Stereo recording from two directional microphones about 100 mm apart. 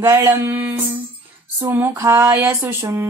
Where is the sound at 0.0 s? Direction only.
25° right (ahead or behind).